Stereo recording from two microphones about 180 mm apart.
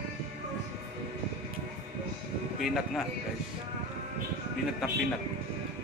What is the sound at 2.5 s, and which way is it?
Speech, centre (ahead or behind).